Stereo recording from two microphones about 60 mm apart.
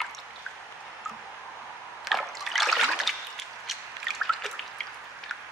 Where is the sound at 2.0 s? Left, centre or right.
Centre.